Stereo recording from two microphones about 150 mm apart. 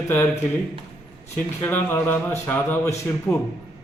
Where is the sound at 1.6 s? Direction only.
10° left (ahead or behind).